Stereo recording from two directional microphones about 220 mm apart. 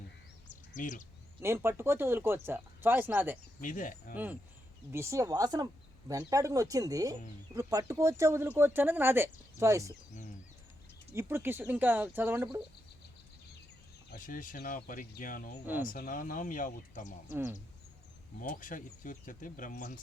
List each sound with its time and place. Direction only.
0.7 s speech: 35° left (ahead or behind)
1.4 s speech: 10° right (ahead or behind)
3.6 s speech: 35° left (ahead or behind)
4.1 s speech: 5° right (ahead or behind)
11.1 s speech: 10° right (ahead or behind)
14.1 s speech: 40° left (ahead or behind)
18.3 s speech: 40° left (ahead or behind)